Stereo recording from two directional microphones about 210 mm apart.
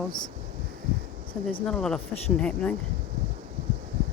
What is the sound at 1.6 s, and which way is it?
Speech, 5° left (ahead or behind).